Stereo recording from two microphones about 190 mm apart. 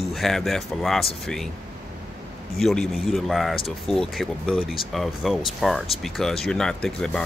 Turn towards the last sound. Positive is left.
turn(degrees=5)  # may be behind; listen again after turning